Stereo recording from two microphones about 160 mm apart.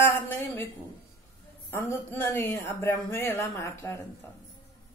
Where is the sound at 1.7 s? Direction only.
15° left (ahead or behind).